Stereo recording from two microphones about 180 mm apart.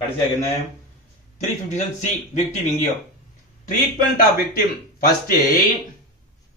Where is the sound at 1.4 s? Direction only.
40° left (ahead or behind).